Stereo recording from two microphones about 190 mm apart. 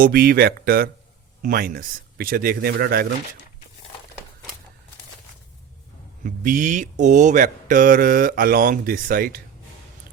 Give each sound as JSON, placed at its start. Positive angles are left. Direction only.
{"t": 0.0, "sound": "mantra", "side_deg": -50}
{"t": 6.2, "sound": "mantra", "side_deg": -45}